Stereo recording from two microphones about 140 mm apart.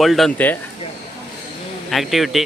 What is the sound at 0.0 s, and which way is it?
Speech, centre (ahead or behind).